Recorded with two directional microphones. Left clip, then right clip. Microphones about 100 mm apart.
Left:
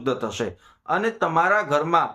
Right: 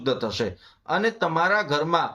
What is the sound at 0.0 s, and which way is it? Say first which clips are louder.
Speech: even; 20° left (ahead or behind).